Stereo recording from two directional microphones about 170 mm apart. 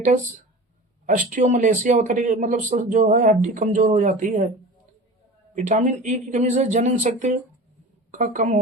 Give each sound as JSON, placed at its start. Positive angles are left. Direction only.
{"t": 1.0, "sound": "speech", "side_deg": -50}
{"t": 5.5, "sound": "speech", "side_deg": -50}